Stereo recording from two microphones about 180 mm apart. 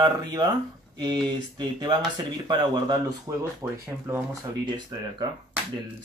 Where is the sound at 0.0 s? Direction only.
20° right (ahead or behind).